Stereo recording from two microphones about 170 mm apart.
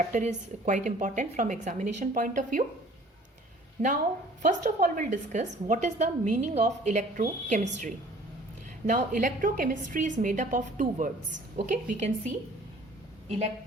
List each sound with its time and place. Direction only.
0.1 s a woman's voice: 45° right (ahead or behind)
3.8 s a woman's voice: 45° right (ahead or behind)
8.9 s a woman's voice: 55° right (ahead or behind); by 13.5 s 40° right (ahead or behind)